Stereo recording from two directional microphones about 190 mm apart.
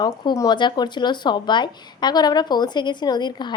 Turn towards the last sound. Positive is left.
turn(degrees=25)  # may be behind; listen again after turning